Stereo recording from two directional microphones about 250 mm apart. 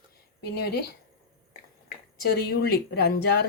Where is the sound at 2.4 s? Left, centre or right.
Left.